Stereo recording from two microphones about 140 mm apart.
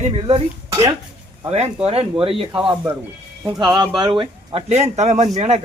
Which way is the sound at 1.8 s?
45° right (ahead or behind).